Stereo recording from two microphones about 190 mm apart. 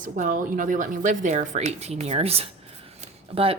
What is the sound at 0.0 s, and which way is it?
Speech, 45° right (ahead or behind).